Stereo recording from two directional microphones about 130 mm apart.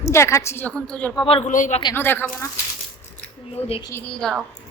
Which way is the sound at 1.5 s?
80° left.